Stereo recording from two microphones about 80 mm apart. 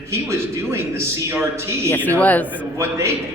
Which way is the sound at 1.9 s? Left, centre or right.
Left.